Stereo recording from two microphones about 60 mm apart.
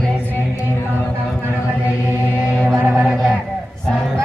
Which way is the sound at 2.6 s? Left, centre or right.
Right.